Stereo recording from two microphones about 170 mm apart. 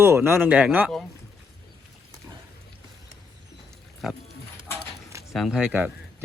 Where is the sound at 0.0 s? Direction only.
15° right (ahead or behind).